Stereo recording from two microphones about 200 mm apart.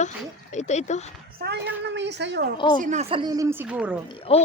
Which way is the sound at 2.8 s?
35° right (ahead or behind).